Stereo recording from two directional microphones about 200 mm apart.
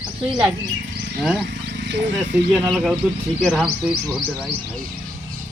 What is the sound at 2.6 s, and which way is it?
Speech, centre (ahead or behind).